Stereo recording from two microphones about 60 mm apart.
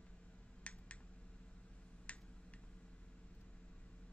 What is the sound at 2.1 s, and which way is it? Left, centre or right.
Tick-tock, left.